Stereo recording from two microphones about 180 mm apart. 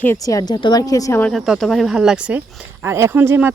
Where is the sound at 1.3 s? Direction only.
Centre (ahead or behind).